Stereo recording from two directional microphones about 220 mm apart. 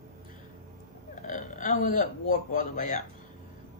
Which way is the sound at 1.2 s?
35° left (ahead or behind).